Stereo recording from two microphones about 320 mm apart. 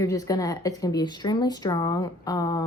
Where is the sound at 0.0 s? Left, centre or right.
Centre.